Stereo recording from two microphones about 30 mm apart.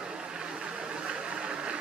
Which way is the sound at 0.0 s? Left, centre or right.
Right.